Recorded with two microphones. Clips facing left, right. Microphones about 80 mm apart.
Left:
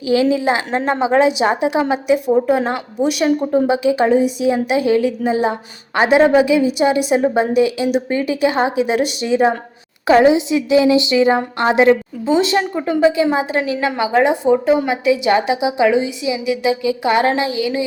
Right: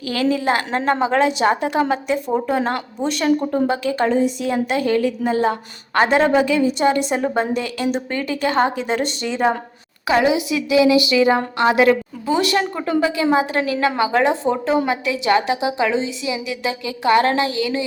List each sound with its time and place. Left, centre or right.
0.0 s a woman's voice: centre
10.1 s a woman's voice: left